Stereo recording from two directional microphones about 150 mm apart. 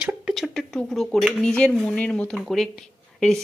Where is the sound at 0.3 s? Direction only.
Centre (ahead or behind).